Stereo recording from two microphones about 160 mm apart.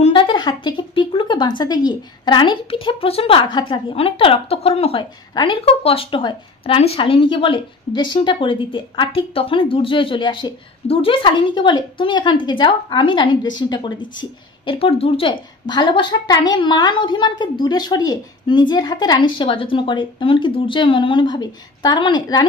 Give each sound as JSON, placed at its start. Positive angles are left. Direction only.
{"t": 0.0, "sound": "a woman's voice", "side_deg": 35}